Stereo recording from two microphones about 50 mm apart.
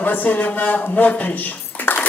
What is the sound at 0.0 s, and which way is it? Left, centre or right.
A man's voice, left.